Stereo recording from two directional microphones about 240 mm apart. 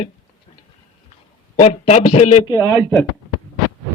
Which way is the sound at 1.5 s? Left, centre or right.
Left.